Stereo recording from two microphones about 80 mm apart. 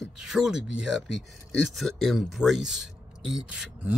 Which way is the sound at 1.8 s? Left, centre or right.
Centre.